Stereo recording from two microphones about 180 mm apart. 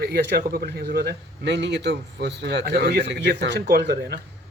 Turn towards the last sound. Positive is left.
turn(degrees=-65)  # may be behind; listen again after turning